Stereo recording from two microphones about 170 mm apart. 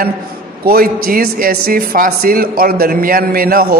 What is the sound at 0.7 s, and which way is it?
A man's voice, 60° right (ahead or behind).